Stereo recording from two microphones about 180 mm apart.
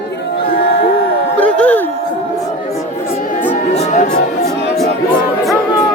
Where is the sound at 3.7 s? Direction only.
40° left (ahead or behind).